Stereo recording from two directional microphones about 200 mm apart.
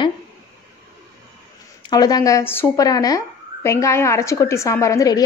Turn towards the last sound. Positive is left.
turn(degrees=15)  # may be behind; listen again after turning